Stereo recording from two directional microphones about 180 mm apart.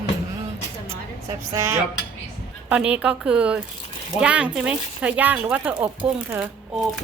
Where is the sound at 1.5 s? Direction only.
15° right (ahead or behind).